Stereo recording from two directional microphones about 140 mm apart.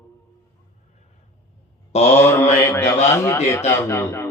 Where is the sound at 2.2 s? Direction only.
20° left (ahead or behind).